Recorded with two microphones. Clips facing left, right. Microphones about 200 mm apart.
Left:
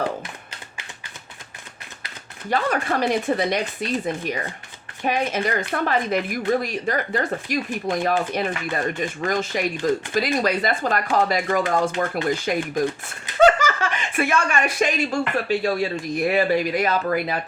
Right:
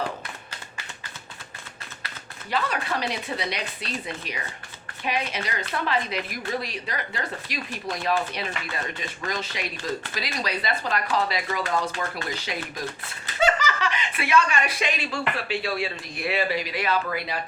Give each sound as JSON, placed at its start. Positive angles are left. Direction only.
{"t": 2.5, "sound": "speech", "side_deg": 50}